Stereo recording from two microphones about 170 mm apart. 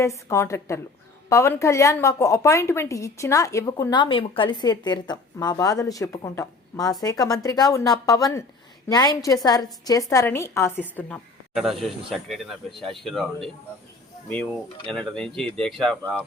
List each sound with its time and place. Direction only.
0.0 s a woman's voice: 15° left (ahead or behind)
11.5 s speech: centre (ahead or behind)
14.8 s speech: centre (ahead or behind)